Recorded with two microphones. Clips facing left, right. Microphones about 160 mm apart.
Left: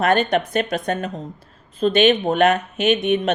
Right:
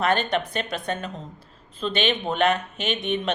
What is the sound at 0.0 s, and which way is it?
Speech, 45° left (ahead or behind).